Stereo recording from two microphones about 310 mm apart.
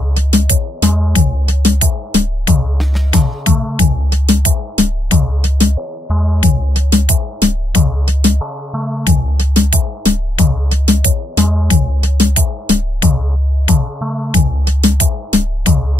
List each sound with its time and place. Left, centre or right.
0.1 s music: right
3.7 s music: right
6.0 s music: centre
6.4 s music: right
8.7 s music: centre
9.0 s music: right
13.7 s music: centre
14.3 s music: right